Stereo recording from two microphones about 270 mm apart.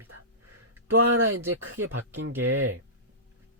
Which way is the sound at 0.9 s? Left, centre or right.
Right.